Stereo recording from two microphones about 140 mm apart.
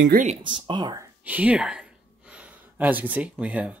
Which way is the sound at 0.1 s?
60° right (ahead or behind).